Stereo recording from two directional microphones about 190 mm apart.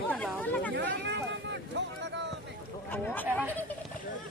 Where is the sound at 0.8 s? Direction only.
65° right (ahead or behind).